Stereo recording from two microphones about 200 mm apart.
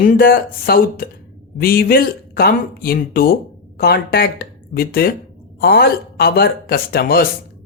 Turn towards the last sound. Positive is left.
turn(degrees=50)  # may be behind; listen again after turning